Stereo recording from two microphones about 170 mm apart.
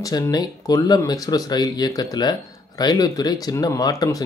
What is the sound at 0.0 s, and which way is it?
Speech, 25° left (ahead or behind).